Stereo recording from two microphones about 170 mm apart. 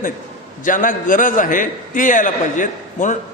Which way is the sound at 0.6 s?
50° left (ahead or behind).